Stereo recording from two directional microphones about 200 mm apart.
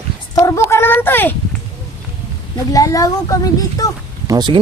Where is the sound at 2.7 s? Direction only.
15° left (ahead or behind).